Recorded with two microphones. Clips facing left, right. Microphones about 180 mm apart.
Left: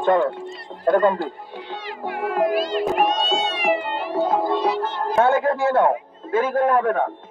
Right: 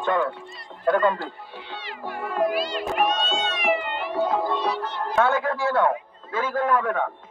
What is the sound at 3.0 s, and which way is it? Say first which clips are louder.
Cat: left 3 dB; 35° left (ahead or behind).